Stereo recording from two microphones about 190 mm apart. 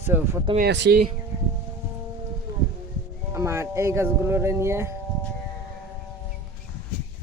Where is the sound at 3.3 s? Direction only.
15° right (ahead or behind).